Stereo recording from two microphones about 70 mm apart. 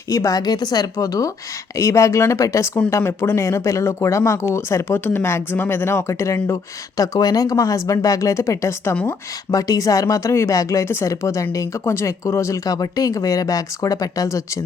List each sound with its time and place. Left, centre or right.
0.1 s speech: left
0.9 s speech: left
4.9 s speech: left
9.5 s speech: left
12.6 s speech: left